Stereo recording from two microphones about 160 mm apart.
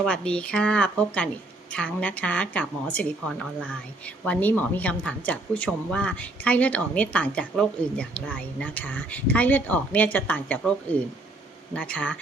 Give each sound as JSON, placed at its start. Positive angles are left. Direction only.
{"t": 0.0, "sound": "a woman's voice", "side_deg": 5}